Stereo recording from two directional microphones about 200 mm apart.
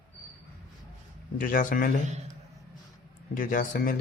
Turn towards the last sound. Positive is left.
turn(degrees=45)  # may be behind; listen again after turning